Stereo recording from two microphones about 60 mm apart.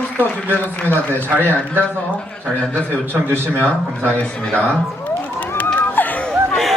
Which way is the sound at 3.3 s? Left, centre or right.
Left.